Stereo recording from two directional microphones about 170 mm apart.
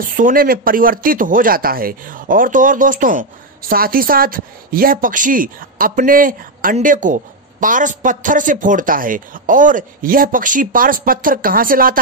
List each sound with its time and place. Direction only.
0.2 s speech: 55° right (ahead or behind)